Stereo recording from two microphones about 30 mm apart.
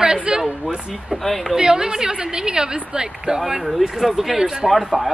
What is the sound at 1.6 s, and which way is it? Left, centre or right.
A woman's voice, right.